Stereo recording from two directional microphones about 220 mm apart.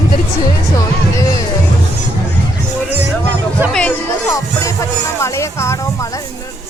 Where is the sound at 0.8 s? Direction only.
15° left (ahead or behind).